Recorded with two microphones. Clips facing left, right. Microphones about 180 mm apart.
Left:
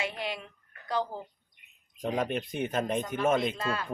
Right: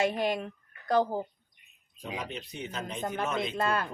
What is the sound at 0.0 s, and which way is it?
A woman's voice, 45° right (ahead or behind).